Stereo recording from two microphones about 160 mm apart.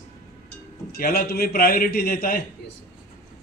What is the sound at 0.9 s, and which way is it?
A man's voice, 70° left (ahead or behind).